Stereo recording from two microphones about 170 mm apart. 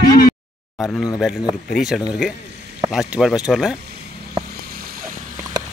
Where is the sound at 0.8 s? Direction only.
5° right (ahead or behind).